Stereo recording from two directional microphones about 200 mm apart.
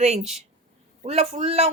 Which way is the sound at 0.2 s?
Centre (ahead or behind).